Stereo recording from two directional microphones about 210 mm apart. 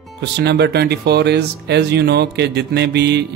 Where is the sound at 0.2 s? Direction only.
55° right (ahead or behind).